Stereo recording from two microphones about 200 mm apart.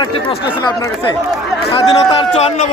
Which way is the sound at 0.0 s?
25° left (ahead or behind).